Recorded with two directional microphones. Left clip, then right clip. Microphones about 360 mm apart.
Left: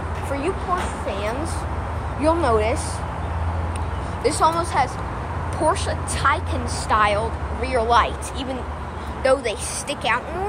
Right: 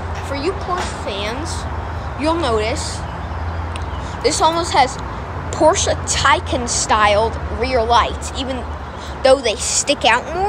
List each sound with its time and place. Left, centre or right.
2.2 s speech: centre
4.2 s a woman's voice: centre